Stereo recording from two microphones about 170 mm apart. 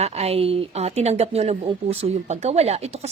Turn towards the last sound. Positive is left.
turn(degrees=-40)  # may be behind; listen again after turning